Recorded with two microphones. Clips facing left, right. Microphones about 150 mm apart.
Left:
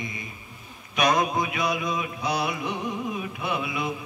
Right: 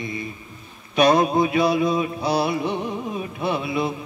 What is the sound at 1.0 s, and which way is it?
Mantra, 30° right (ahead or behind).